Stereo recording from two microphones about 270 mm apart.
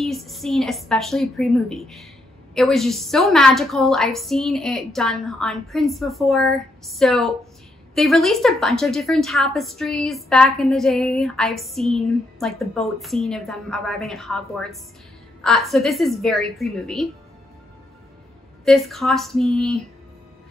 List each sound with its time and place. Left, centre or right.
0.0 s a woman's voice: centre
18.7 s a woman's voice: centre